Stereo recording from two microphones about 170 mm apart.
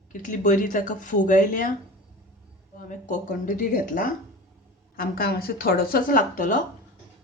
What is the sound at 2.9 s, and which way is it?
Speech, 45° left (ahead or behind).